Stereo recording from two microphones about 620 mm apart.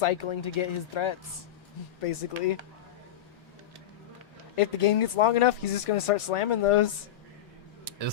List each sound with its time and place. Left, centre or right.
0.0 s speech: left
4.5 s speech: left